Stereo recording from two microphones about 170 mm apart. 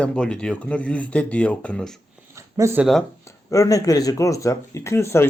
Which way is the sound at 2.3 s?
15° right (ahead or behind).